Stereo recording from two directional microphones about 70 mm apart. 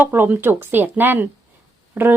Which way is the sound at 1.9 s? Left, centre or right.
Right.